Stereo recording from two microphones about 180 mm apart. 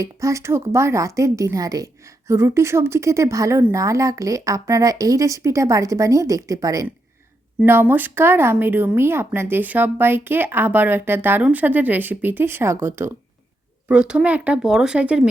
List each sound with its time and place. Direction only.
0.0 s a woman's voice: 15° right (ahead or behind)